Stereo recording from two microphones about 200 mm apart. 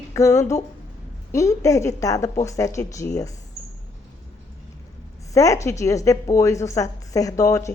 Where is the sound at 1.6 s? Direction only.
15° left (ahead or behind).